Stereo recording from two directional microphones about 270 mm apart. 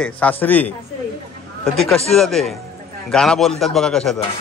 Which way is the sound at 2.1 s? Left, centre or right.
Centre.